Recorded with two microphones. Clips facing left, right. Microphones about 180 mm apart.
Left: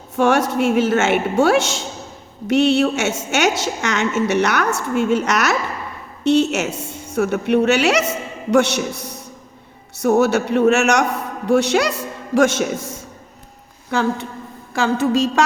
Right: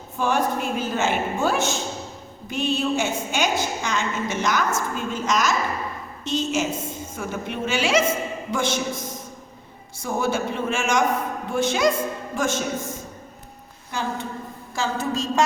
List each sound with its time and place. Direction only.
0.2 s a woman's voice: 80° left
14.8 s a woman's voice: 75° left (ahead or behind)